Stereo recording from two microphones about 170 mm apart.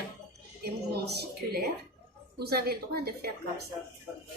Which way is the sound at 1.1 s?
70° right (ahead or behind).